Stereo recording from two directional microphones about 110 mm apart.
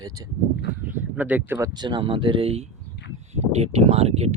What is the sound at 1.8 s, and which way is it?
Speech, 45° right (ahead or behind).